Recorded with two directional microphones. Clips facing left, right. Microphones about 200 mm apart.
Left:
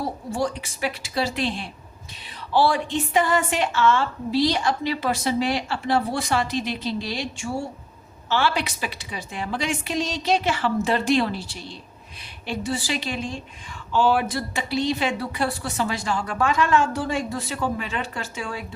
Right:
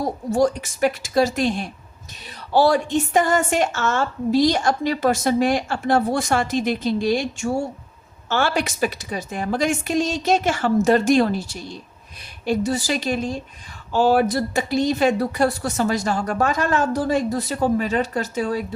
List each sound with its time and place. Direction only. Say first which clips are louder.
0.0 s a woman's voice: right 6 dB; 45° right (ahead or behind)